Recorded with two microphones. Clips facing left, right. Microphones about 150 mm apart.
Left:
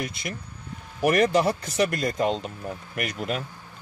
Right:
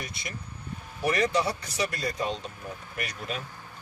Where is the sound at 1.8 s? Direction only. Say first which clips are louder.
Left 6 dB; 55° left (ahead or behind).